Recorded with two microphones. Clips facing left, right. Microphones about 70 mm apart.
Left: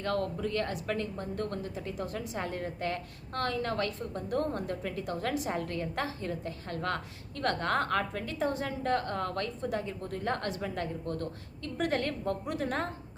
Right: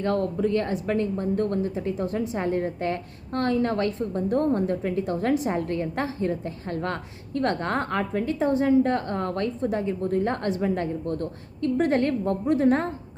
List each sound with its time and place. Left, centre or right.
0.0 s a woman's voice: right